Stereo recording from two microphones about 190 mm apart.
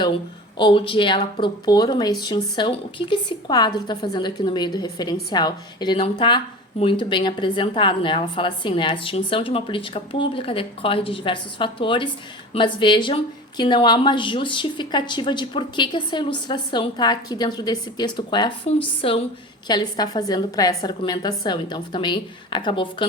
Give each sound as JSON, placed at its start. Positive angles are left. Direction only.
{"t": 0.5, "sound": "speech", "side_deg": 25}